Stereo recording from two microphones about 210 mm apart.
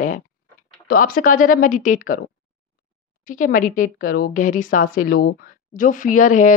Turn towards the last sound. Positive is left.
turn(degrees=35)  # may be behind; listen again after turning